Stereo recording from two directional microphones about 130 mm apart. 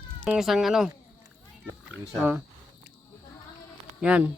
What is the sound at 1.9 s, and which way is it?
Speech, 15° right (ahead or behind).